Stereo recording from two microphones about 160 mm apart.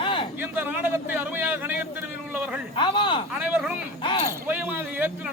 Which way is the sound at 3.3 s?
10° right (ahead or behind).